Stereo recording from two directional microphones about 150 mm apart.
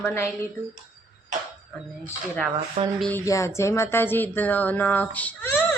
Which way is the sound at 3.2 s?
20° left (ahead or behind).